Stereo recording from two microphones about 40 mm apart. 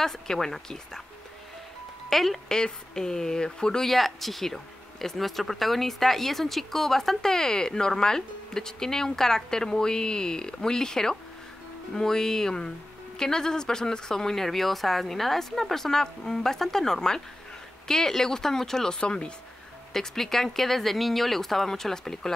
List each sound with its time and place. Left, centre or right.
0.0 s speech: centre
2.0 s speech: centre
2.4 s speech: centre
3.8 s speech: centre; by 19.3 s left
19.9 s speech: centre